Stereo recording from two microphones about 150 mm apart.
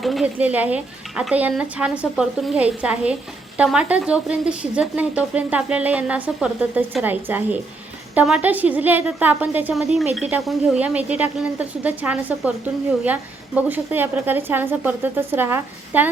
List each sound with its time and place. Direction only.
0.0 s speech: centre (ahead or behind)
0.3 s speech: 10° right (ahead or behind)